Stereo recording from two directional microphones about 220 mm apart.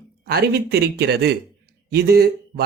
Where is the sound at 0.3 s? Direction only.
45° right (ahead or behind).